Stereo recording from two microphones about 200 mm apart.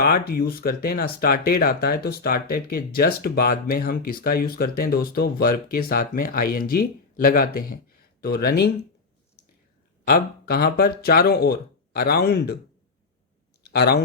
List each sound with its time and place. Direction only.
0.0 s speech: 50° left (ahead or behind)
10.1 s speech: 50° left (ahead or behind)
13.6 s a sound: 55° left (ahead or behind)